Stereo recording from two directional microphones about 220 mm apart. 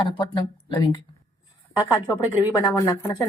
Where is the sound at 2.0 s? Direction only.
20° left (ahead or behind).